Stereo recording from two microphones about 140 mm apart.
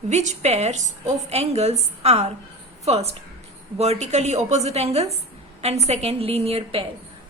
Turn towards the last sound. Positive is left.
turn(degrees=-45)  # may be behind; listen again after turning